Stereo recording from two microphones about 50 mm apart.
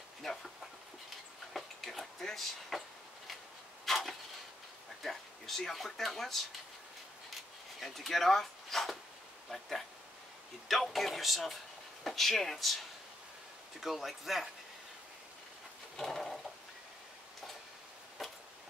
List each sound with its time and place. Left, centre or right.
0.2 s speech: centre
1.5 s speech: centre
3.8 s a sound: centre
5.0 s speech: centre
7.8 s speech: centre
16.0 s speech: centre
18.2 s a sound: centre